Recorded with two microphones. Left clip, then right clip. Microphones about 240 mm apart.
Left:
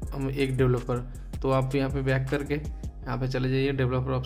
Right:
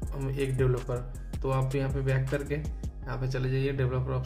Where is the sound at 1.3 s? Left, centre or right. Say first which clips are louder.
Left 4 dB; centre.